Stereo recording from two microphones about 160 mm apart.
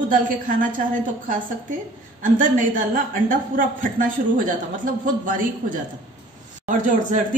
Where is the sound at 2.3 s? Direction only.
55° right (ahead or behind).